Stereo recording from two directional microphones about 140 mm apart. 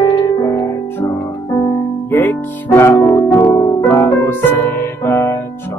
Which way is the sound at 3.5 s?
35° left (ahead or behind).